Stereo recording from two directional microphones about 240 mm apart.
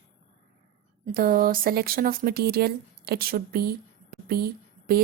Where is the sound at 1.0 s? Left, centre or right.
Right.